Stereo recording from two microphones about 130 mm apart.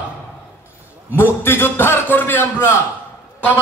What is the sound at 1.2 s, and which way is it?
A man's voice, 15° left (ahead or behind).